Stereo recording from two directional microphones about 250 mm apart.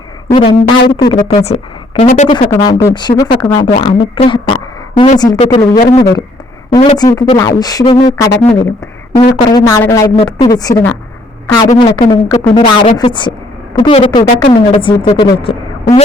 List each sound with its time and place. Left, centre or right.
0.3 s speech: centre
2.5 s a woman's voice: centre
12.5 s a woman's voice: left